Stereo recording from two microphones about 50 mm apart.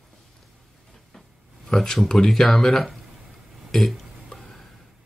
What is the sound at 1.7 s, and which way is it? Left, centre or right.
Speech, centre.